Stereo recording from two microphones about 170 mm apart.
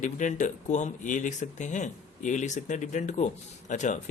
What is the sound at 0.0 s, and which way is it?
Speech, 50° left (ahead or behind).